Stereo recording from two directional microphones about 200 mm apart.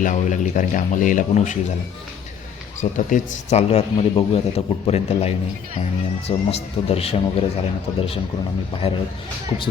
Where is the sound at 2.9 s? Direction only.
35° left (ahead or behind).